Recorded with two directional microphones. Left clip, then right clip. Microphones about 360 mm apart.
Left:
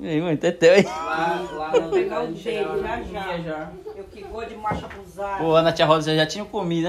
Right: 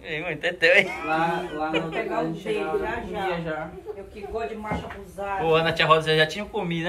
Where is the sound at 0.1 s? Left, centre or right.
Centre.